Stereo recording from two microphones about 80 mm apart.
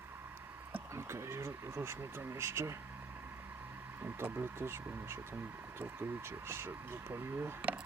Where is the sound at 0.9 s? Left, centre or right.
Right.